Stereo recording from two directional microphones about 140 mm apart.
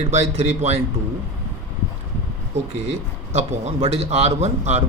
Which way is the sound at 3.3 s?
50° right (ahead or behind).